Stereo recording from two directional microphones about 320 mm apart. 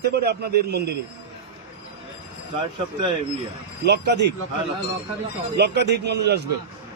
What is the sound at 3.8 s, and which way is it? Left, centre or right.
Speech, right.